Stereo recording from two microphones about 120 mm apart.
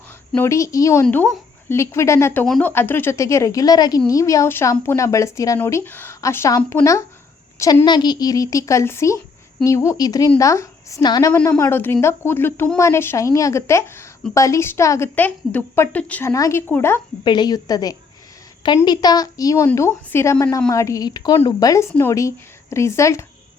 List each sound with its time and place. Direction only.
0.3 s a woman's voice: 25° left (ahead or behind)
7.9 s a woman's voice: 35° left (ahead or behind); by 16.3 s 15° left (ahead or behind)
16.3 s a woman's voice: 25° left (ahead or behind)
17.2 s a woman's voice: 35° left (ahead or behind)